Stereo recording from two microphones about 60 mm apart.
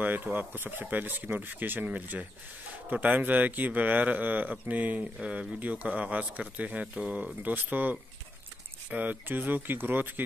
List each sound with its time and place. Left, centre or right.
0.0 s speech: right